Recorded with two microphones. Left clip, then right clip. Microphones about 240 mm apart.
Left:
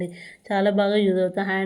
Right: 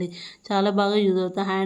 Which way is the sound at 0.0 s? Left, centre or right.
Centre.